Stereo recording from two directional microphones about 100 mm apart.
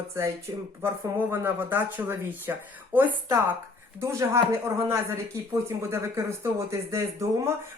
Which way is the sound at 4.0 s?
30° right (ahead or behind).